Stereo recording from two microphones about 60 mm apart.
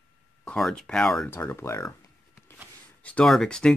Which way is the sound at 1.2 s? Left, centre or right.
Left.